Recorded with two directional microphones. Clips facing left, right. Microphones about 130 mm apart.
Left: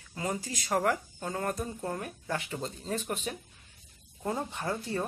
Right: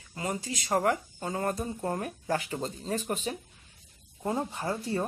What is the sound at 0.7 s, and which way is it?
Speech, 20° right (ahead or behind).